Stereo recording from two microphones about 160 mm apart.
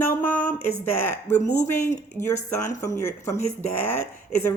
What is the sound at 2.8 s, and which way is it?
Speech, 15° left (ahead or behind).